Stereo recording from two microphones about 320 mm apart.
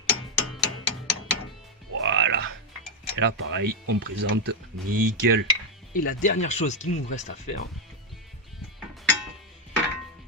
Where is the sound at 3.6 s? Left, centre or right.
Right.